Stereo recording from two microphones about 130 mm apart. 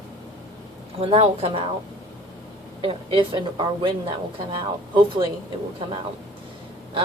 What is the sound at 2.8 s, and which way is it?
A woman's voice, 40° right (ahead or behind).